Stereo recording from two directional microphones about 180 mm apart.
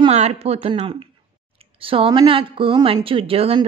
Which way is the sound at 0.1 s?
35° right (ahead or behind).